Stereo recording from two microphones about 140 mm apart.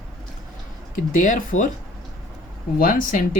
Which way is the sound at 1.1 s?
65° left (ahead or behind).